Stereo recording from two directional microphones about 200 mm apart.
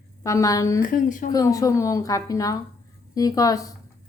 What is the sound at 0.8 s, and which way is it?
Speech, 40° left (ahead or behind).